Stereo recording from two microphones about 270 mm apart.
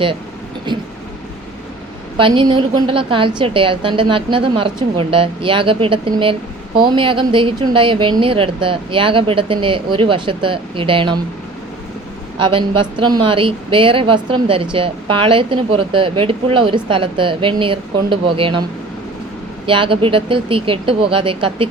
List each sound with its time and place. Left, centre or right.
0.7 s speech: centre
2.1 s speech: centre
12.4 s speech: centre
19.6 s speech: centre